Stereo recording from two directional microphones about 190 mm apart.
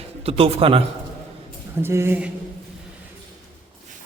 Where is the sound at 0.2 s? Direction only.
30° right (ahead or behind).